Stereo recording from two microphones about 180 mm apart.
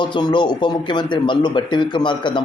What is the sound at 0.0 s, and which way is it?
Speech, 25° left (ahead or behind).